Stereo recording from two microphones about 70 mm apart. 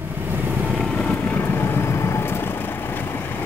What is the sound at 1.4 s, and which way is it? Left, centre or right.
Vehicle, left.